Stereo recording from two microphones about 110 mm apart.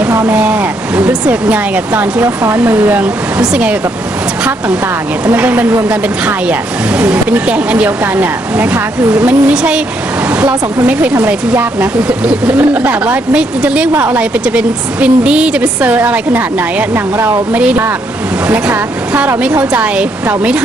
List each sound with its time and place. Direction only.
0.1 s a sound: 25° right (ahead or behind)
0.3 s speech: 10° right (ahead or behind)
2.2 s speech: 25° right (ahead or behind); by 3.8 s 10° right (ahead or behind)
5.2 s speech: 15° right (ahead or behind)
11.8 s speech: 10° right (ahead or behind)